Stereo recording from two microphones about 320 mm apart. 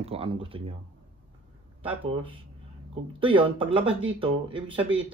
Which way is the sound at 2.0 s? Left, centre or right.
Centre.